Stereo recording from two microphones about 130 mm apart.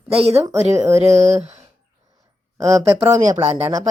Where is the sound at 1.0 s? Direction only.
55° right (ahead or behind).